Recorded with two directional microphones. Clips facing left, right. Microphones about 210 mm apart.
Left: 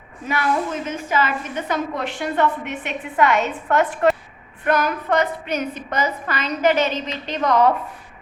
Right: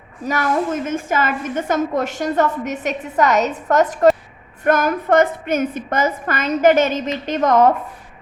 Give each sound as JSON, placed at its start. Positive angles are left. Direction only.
{"t": 0.3, "sound": "a woman's voice", "side_deg": -45}